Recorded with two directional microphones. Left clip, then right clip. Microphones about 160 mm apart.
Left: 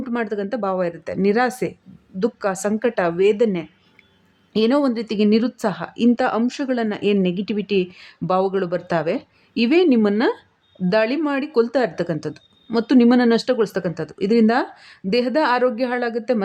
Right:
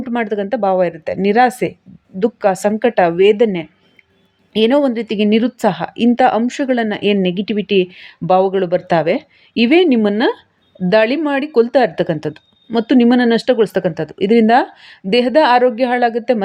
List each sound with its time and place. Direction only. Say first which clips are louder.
0.0 s speech: right 5 dB; 15° right (ahead or behind)